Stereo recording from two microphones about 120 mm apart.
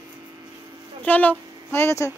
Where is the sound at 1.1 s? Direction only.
15° left (ahead or behind).